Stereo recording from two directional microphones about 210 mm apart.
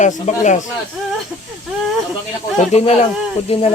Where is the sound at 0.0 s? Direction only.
35° left (ahead or behind).